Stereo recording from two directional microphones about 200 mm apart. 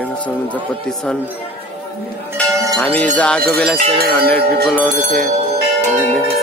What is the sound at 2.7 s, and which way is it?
Speech, 10° left (ahead or behind).